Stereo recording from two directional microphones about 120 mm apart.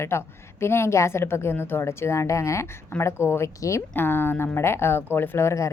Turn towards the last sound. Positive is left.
turn(degrees=25)  # may be behind; listen again after turning